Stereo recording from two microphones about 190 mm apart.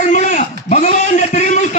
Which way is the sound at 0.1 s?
40° left (ahead or behind).